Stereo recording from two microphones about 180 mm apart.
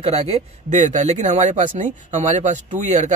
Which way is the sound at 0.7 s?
40° right (ahead or behind).